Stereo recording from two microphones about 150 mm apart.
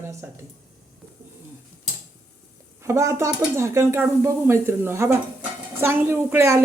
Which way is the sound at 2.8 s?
20° right (ahead or behind).